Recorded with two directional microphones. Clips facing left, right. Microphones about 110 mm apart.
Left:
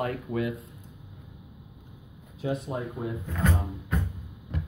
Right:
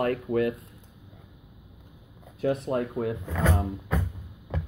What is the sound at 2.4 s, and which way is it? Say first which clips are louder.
Speech: right 5 dB; 60° right (ahead or behind).